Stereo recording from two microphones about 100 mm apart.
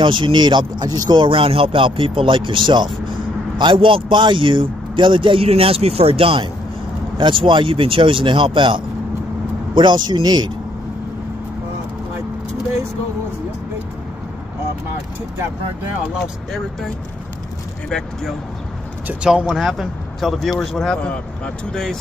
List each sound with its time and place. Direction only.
0.0 s speech: 55° right (ahead or behind)
1.2 s a man's voice: 60° right (ahead or behind); by 10.5 s 45° right (ahead or behind)
16.2 s speech: centre (ahead or behind)
19.0 s speech: 10° right (ahead or behind); by 21.1 s 5° left (ahead or behind)